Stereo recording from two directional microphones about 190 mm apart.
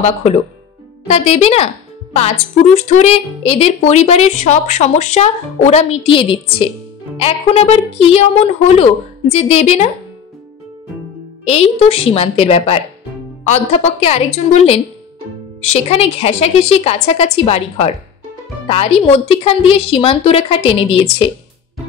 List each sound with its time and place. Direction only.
1.0 s a woman's voice: 35° left (ahead or behind)
11.4 s a woman's voice: 35° left (ahead or behind)